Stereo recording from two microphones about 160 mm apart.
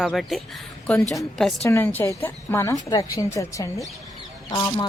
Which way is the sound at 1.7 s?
15° left (ahead or behind).